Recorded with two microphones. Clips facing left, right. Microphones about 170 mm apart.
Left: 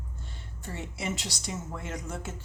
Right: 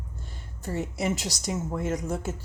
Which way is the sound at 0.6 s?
40° right (ahead or behind).